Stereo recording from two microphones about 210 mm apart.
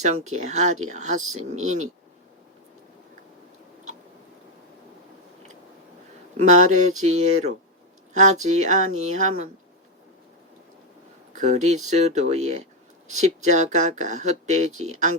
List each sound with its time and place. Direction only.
0.0 s speech: 35° right (ahead or behind)
6.3 s speech: 35° right (ahead or behind)
11.3 s speech: 35° right (ahead or behind)